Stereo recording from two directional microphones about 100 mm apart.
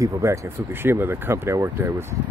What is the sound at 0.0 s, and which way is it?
Speech, 30° right (ahead or behind).